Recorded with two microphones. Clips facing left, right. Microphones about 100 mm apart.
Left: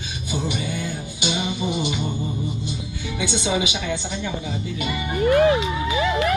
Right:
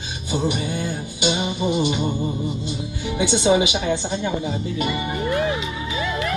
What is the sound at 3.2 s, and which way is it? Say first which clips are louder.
Music: right 6 dB; 35° right (ahead or behind).